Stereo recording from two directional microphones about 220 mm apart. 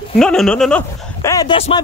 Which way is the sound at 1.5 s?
25° left (ahead or behind).